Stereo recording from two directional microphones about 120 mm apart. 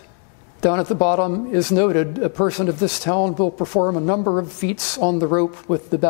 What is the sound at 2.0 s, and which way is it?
Speech, 10° left (ahead or behind).